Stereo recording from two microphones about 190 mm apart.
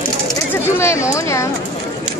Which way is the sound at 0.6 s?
15° left (ahead or behind).